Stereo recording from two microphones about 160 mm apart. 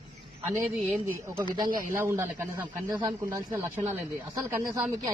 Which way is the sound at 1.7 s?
60° right (ahead or behind).